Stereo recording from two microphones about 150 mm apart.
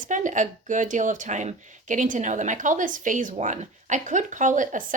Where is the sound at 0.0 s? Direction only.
55° right (ahead or behind).